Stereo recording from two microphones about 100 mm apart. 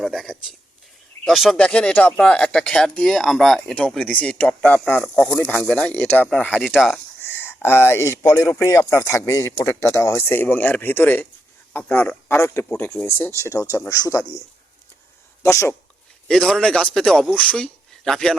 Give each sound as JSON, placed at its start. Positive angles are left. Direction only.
{"t": 0.0, "sound": "speech", "side_deg": 0}
{"t": 6.7, "sound": "speech", "side_deg": 0}
{"t": 7.2, "sound": "a sound", "side_deg": 20}
{"t": 8.2, "sound": "speech", "side_deg": 10}
{"t": 8.5, "sound": "a man's voice", "side_deg": 30}
{"t": 15.4, "sound": "speech", "side_deg": 25}
{"t": 16.3, "sound": "speech", "side_deg": 5}